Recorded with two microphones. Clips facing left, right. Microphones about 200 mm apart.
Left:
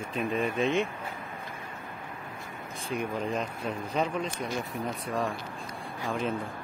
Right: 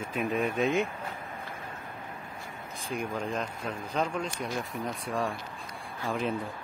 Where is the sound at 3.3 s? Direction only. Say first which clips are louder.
Left 2 dB; 5° left (ahead or behind).